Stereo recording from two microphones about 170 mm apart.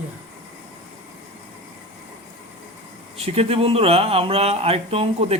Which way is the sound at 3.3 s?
35° right (ahead or behind).